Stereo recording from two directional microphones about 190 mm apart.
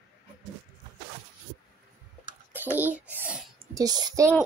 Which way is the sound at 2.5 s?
10° right (ahead or behind).